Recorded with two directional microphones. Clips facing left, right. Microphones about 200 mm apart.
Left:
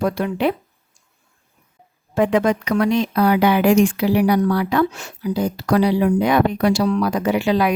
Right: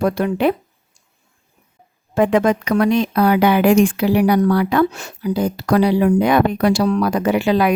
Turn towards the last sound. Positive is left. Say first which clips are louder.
# right 2 dB
turn(degrees=-55)  # may be behind; listen again after turning